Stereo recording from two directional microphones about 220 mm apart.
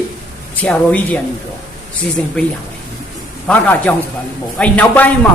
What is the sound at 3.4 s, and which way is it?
A man's voice, 5° left (ahead or behind).